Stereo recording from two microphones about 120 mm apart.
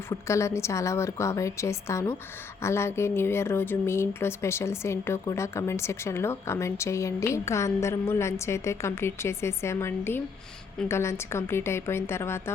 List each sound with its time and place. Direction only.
0.1 s a woman's voice: 25° left (ahead or behind)